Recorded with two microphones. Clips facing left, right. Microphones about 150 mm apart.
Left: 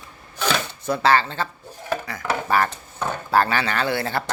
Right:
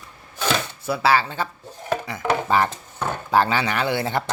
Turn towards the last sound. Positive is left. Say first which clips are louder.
# right 1 dB
turn(degrees=-20)  # may be behind; listen again after turning